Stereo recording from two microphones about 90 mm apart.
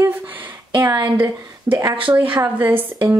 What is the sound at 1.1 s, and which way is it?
Speech, 20° right (ahead or behind).